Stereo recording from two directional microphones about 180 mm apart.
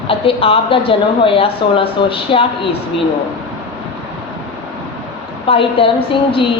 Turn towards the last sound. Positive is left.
turn(degrees=30)  # may be behind; listen again after turning